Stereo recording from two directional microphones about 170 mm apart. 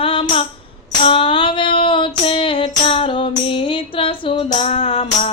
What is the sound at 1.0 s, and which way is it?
Female singing, 30° left (ahead or behind).